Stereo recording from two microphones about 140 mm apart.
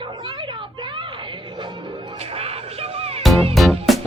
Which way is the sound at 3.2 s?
Centre (ahead or behind).